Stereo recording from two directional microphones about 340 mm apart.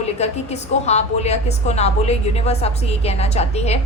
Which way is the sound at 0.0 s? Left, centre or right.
Centre.